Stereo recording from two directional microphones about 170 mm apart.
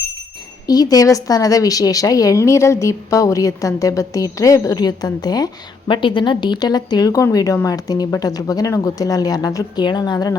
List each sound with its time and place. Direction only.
0.7 s a woman's voice: 20° left (ahead or behind)